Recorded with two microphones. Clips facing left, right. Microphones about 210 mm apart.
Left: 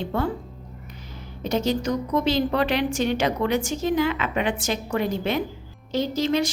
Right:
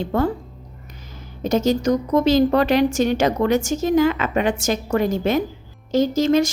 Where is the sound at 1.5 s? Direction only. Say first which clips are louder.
Right 5 dB; 45° right (ahead or behind).